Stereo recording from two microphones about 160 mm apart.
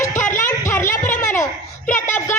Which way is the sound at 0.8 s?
55° left (ahead or behind).